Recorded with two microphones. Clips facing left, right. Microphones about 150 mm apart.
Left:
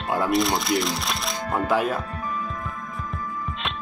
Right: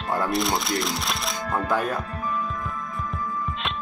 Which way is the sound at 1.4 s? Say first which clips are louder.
Left 2 dB; 20° left (ahead or behind).